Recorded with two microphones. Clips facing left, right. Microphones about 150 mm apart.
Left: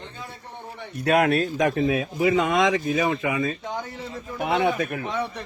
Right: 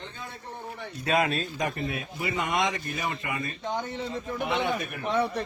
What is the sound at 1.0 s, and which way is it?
Speech, 70° left (ahead or behind).